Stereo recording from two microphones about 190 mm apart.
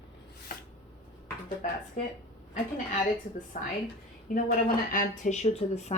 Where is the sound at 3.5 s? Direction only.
40° left (ahead or behind).